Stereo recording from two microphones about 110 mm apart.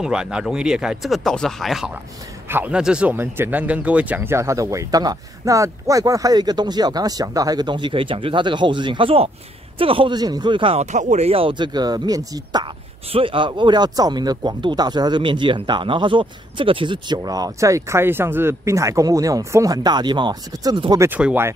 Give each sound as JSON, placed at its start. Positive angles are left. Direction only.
{"t": 0.0, "sound": "speech", "side_deg": -5}
{"t": 2.4, "sound": "a man's voice", "side_deg": -20}
{"t": 2.7, "sound": "speech", "side_deg": -10}
{"t": 10.1, "sound": "speech", "side_deg": -40}
{"t": 10.8, "sound": "speech", "side_deg": -90}
{"t": 13.1, "sound": "speech", "side_deg": -55}